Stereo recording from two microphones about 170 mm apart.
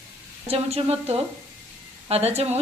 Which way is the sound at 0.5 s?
35° right (ahead or behind).